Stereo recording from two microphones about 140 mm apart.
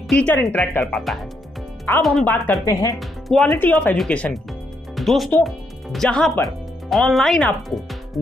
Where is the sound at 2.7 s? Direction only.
25° left (ahead or behind).